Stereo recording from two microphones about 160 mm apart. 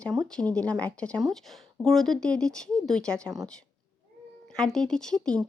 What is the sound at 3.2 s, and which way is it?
Speech, 20° right (ahead or behind).